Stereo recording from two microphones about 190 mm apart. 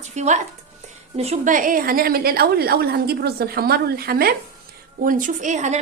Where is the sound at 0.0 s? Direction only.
40° right (ahead or behind).